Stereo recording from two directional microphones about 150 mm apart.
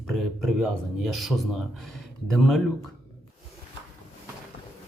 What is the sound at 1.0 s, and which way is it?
Speech, centre (ahead or behind).